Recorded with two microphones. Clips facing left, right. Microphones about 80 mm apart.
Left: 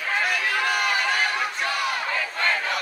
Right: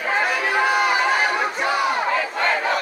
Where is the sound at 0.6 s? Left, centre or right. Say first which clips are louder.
Right 8 dB; centre.